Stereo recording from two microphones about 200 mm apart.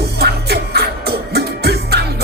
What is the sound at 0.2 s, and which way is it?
Music, 55° right (ahead or behind).